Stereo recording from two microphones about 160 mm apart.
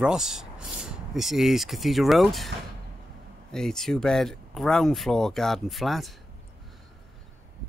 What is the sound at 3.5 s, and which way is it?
Speech, 5° left (ahead or behind).